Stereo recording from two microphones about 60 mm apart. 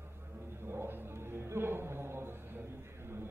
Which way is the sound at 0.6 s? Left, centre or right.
Right.